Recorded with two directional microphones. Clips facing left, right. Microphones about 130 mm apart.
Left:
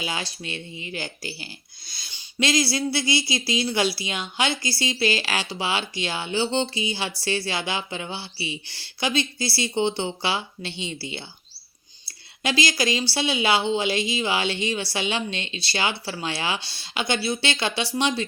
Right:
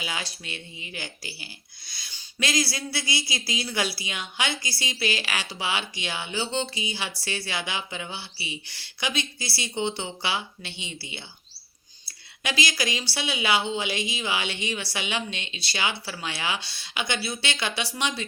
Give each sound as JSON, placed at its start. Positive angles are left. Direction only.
{"t": 0.0, "sound": "speech", "side_deg": 30}
{"t": 12.4, "sound": "speech", "side_deg": 30}